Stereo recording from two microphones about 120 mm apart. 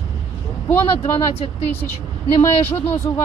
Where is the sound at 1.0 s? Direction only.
60° left (ahead or behind).